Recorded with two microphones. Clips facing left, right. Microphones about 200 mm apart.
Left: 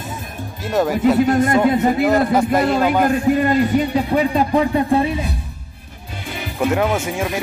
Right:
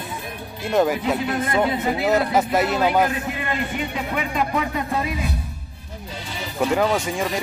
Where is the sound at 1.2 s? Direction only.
45° left (ahead or behind).